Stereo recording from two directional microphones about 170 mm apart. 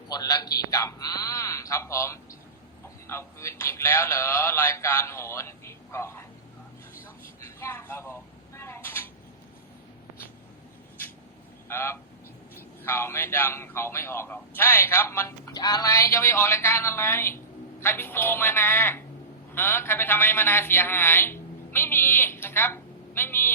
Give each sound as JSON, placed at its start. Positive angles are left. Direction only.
{"t": 0.1, "sound": "speech", "side_deg": 20}
{"t": 7.4, "sound": "a sound", "side_deg": 15}
{"t": 11.7, "sound": "speech", "side_deg": 15}